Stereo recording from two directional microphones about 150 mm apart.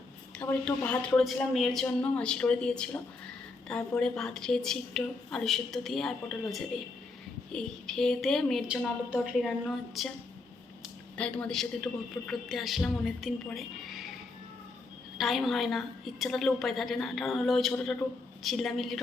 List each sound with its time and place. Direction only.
0.4 s a woman's voice: 15° left (ahead or behind)
11.2 s a woman's voice: 5° left (ahead or behind)
15.2 s a woman's voice: centre (ahead or behind)